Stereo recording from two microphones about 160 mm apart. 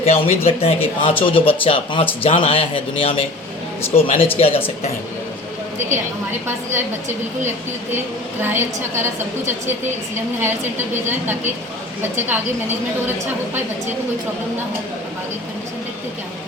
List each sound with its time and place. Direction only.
0.0 s speech: 40° left (ahead or behind)
8.4 s a woman's voice: 15° right (ahead or behind)
12.1 s a woman's voice: 15° right (ahead or behind)